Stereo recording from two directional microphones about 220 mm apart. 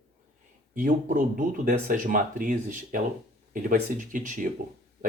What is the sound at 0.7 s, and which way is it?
Speech, 35° right (ahead or behind).